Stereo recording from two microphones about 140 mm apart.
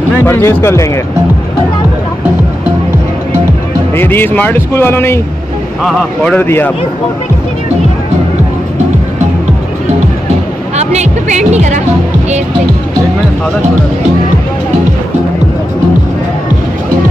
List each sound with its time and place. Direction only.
0.2 s a man's voice: 15° left (ahead or behind)
3.9 s a man's voice: 15° left (ahead or behind)
5.9 s a man's voice: 5° left (ahead or behind)
6.4 s a man's voice: 15° left (ahead or behind)
10.8 s speech: 55° right (ahead or behind)